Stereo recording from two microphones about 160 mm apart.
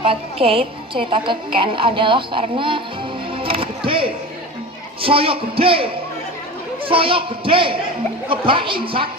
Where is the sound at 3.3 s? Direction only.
35° right (ahead or behind).